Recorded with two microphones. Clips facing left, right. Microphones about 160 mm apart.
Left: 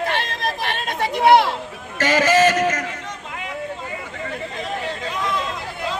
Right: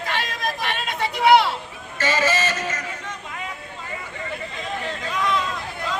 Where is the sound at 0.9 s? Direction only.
50° left (ahead or behind).